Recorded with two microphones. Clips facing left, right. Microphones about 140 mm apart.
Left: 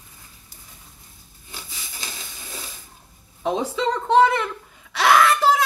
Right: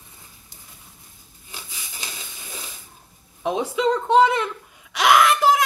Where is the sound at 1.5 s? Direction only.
15° right (ahead or behind).